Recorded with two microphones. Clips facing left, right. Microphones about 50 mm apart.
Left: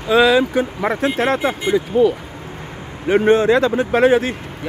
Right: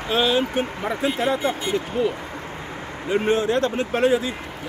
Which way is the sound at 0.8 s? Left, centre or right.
Left.